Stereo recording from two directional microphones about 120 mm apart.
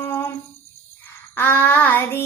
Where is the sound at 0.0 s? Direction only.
15° left (ahead or behind).